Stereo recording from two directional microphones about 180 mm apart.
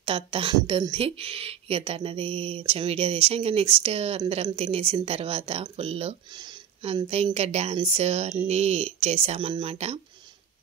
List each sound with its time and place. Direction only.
0.0 s speech: 30° right (ahead or behind)